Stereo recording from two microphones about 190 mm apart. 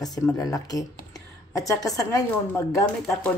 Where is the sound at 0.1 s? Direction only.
20° left (ahead or behind).